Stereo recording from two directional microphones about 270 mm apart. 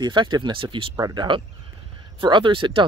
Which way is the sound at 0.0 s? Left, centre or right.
Centre.